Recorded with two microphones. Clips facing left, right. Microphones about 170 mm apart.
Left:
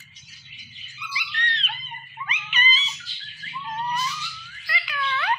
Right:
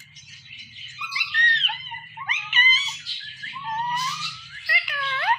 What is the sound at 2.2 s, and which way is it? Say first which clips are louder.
Dog: left 1 dB; 45° right (ahead or behind).